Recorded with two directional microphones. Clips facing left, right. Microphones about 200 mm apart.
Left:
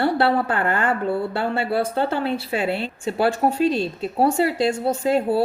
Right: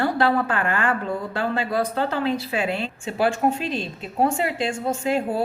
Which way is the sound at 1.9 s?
30° left (ahead or behind).